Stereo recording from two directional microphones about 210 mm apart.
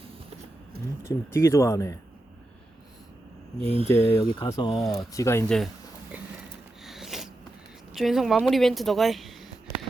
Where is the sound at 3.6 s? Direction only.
30° left (ahead or behind).